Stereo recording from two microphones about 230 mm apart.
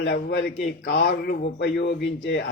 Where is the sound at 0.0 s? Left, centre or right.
Left.